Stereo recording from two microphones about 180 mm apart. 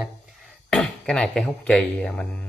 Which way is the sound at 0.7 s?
5° left (ahead or behind).